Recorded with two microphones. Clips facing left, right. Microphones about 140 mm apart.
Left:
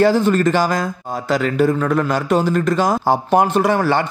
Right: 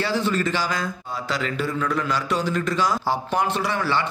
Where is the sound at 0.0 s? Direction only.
45° left (ahead or behind).